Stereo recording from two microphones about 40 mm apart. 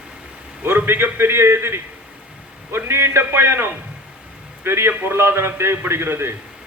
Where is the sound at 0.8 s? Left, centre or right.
Right.